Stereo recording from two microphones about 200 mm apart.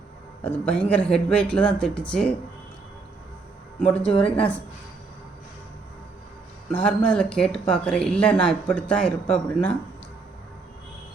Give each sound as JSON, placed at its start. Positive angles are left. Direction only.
{"t": 0.4, "sound": "speech", "side_deg": 5}
{"t": 3.8, "sound": "speech", "side_deg": 30}
{"t": 6.8, "sound": "speech", "side_deg": 5}